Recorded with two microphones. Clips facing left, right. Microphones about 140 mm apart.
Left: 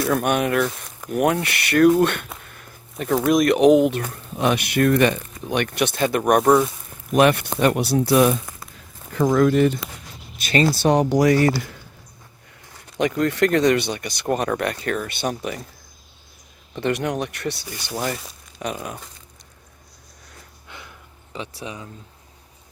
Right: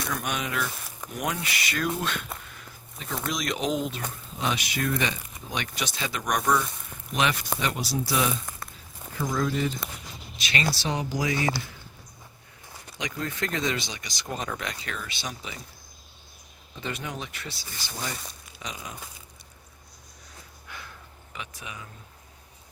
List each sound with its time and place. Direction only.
0.0 s speech: 60° left (ahead or behind)
2.5 s a sound: 55° left (ahead or behind)
3.2 s speech: 55° left (ahead or behind)
10.4 s speech: 40° left (ahead or behind)
10.8 s speech: 65° left (ahead or behind)
13.0 s speech: 65° left (ahead or behind)
16.7 s speech: 65° left (ahead or behind)
20.7 s a sound: 20° left (ahead or behind)
21.3 s speech: 30° left (ahead or behind)